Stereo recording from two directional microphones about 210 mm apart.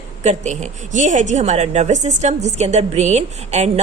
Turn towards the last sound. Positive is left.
turn(degrees=-30)  # may be behind; listen again after turning